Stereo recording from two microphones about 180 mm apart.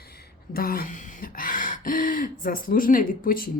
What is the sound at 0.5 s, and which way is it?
Speech, 55° left (ahead or behind).